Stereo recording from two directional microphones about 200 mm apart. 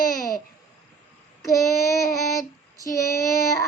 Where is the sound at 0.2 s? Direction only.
45° left (ahead or behind).